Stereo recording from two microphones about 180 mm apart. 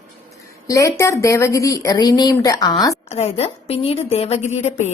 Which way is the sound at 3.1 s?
35° left (ahead or behind).